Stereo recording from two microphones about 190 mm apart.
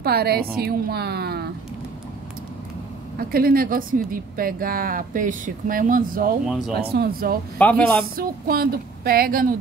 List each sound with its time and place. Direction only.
0.0 s speech: 55° right (ahead or behind)
3.2 s a woman's voice: 50° right (ahead or behind)
7.5 s speech: 5° left (ahead or behind)
8.2 s a woman's voice: 50° right (ahead or behind)